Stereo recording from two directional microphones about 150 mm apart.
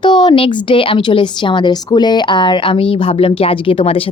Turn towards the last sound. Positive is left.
turn(degrees=35)  # may be behind; listen again after turning